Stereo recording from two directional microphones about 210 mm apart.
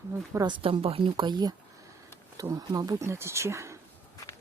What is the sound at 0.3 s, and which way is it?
Speech, 20° right (ahead or behind).